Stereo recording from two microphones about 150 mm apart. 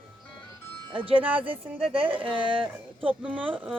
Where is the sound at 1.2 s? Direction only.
10° right (ahead or behind).